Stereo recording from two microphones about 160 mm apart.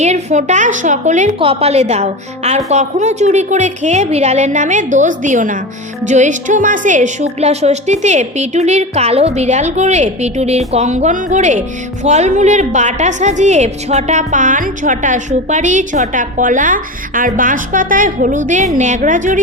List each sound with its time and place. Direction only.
0.0 s a woman's voice: 45° right (ahead or behind)
1.4 s a woman's voice: 35° right (ahead or behind); by 19.4 s 55° right (ahead or behind)